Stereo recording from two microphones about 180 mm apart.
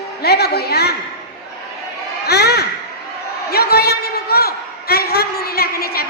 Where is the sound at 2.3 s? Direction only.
65° left (ahead or behind).